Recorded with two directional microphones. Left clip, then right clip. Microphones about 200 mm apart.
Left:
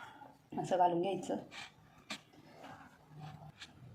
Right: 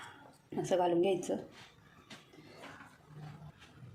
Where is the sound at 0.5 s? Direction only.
35° right (ahead or behind).